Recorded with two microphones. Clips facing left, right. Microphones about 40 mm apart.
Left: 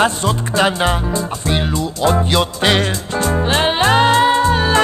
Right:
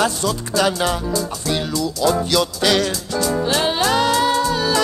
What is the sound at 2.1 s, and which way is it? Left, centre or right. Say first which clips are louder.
Music: left 2 dB; left.